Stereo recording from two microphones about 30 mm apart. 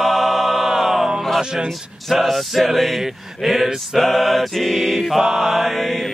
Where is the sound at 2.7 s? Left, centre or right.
Centre.